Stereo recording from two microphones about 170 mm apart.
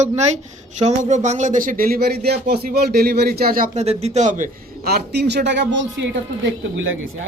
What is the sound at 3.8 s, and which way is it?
A man's voice, 40° right (ahead or behind).